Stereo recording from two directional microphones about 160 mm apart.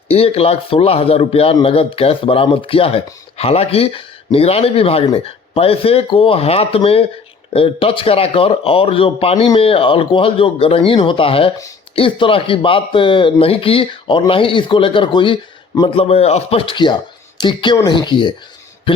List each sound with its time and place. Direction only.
0.1 s speech: 40° left (ahead or behind)
16.0 s speech: 40° left (ahead or behind)
18.9 s a sound: 30° left (ahead or behind)